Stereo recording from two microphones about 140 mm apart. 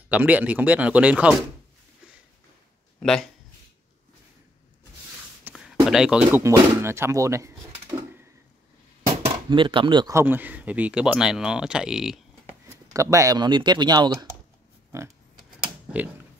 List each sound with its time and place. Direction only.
0.1 s speech: 10° right (ahead or behind)
3.0 s speech: 5° left (ahead or behind)
5.5 s a sound: 15° right (ahead or behind)
5.9 s speech: 5° right (ahead or behind)
6.4 s speech: 20° right (ahead or behind)
9.2 s speech: 35° right (ahead or behind)
10.1 s speech: 15° right (ahead or behind)
12.9 s speech: 20° right (ahead or behind)